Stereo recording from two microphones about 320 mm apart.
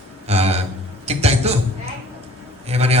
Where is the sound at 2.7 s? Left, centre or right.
Centre.